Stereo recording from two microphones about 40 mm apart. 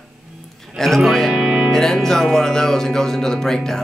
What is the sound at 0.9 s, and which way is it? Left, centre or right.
Speech, centre.